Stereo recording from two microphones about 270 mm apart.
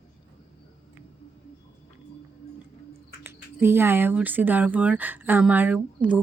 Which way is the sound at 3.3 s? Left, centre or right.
Centre.